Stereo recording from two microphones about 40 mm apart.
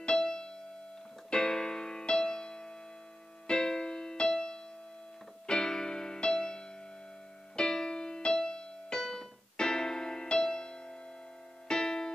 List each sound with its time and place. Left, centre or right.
0.1 s music: centre
1.3 s keyboard: centre
3.4 s music: centre
7.5 s keyboard: centre
8.3 s music: centre
9.0 s keyboard: centre
11.6 s music: centre